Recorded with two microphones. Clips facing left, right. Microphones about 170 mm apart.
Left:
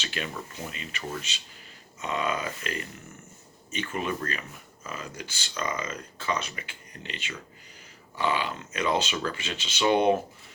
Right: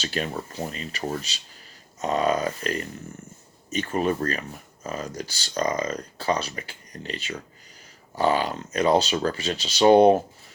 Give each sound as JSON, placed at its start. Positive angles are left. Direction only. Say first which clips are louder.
{"t": 0.0, "sound": "speech", "louder": "right 6 dB", "side_deg": -40}